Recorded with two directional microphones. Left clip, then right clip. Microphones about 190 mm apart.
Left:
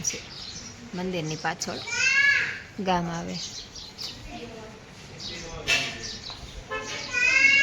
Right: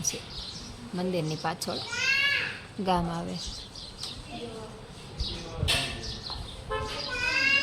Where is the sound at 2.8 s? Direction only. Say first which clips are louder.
Left 1 dB; 10° left (ahead or behind).